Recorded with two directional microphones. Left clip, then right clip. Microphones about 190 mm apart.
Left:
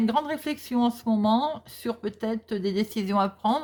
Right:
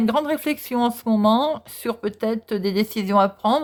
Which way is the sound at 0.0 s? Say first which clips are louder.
Right 5 dB; 30° right (ahead or behind).